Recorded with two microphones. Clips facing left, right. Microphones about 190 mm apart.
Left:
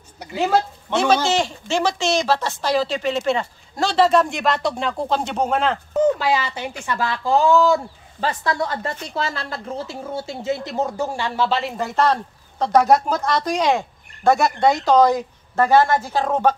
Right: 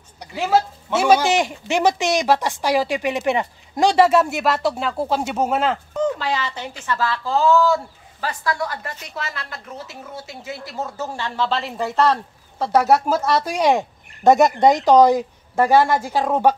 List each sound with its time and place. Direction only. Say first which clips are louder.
0.2 s speech: even; centre (ahead or behind)
6.1 s a woman's voice: left 3 dB; 10° left (ahead or behind); by 16.5 s 10° right (ahead or behind)